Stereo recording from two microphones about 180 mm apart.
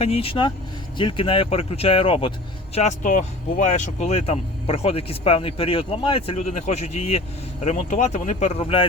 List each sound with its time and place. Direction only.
0.0 s speech: 35° left (ahead or behind)
2.7 s speech: 40° left (ahead or behind)